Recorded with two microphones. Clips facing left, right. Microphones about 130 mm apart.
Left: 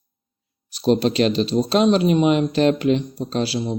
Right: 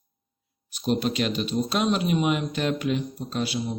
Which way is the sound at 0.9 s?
90° left.